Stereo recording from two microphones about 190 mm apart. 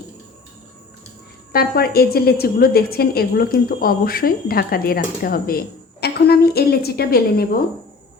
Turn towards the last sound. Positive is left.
turn(degrees=55)  # may be behind; listen again after turning